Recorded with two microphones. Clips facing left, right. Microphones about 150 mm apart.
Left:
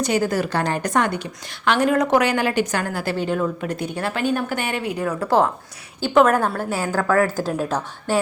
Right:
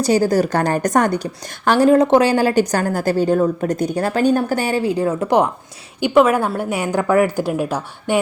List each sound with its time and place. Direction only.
0.0 s a woman's voice: 35° right (ahead or behind); by 5.5 s 20° right (ahead or behind)
6.0 s a woman's voice: 10° right (ahead or behind)